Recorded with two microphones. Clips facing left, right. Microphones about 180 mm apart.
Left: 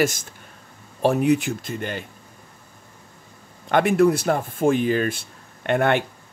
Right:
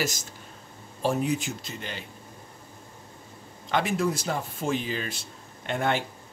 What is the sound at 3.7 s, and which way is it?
Speech, 60° left (ahead or behind).